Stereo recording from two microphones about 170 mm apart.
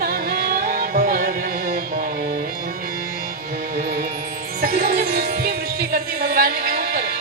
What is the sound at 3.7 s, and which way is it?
Music, 65° right (ahead or behind).